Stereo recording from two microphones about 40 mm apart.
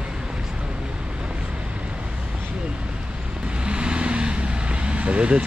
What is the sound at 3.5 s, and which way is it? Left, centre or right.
Vehicle, right.